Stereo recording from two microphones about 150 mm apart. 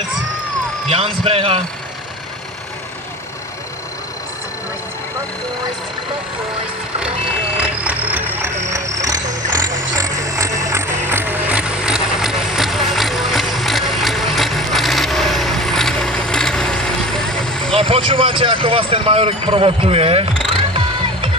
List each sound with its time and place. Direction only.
0.8 s speech: 40° right (ahead or behind)
7.5 s music: 10° right (ahead or behind)
17.7 s speech: 40° right (ahead or behind)
20.5 s music: 35° right (ahead or behind)